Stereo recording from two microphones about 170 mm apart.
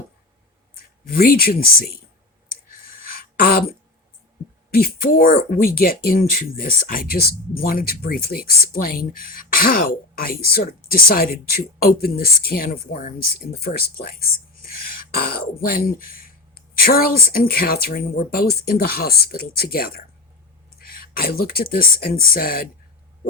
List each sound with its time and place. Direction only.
1.0 s speech: 55° left (ahead or behind)
2.9 s a sound: 60° left (ahead or behind)
4.7 s speech: 55° left (ahead or behind)
15.2 s speech: 60° left (ahead or behind)